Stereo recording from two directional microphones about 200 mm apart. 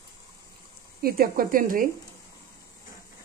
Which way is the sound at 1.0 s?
45° right (ahead or behind).